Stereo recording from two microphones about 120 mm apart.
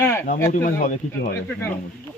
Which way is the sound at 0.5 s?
90° left.